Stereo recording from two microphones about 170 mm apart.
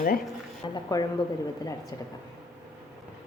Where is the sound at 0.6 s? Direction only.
25° left (ahead or behind).